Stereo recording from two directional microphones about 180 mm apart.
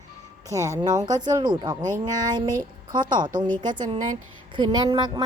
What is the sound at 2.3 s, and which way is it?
A woman's voice, 25° right (ahead or behind).